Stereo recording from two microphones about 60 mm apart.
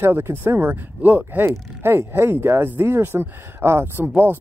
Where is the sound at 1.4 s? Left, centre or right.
Right.